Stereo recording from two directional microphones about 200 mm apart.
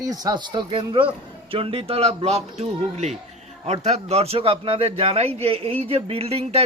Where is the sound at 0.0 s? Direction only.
20° right (ahead or behind).